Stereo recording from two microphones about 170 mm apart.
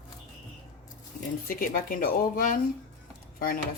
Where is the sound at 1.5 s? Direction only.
55° left (ahead or behind).